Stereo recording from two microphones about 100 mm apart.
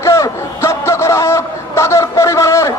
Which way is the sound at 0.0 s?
30° left (ahead or behind).